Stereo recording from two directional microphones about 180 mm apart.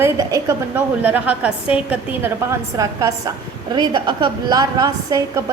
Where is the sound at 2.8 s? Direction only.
20° right (ahead or behind).